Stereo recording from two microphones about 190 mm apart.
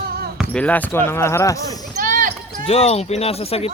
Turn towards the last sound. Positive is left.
turn(degrees=30)  # may be behind; listen again after turning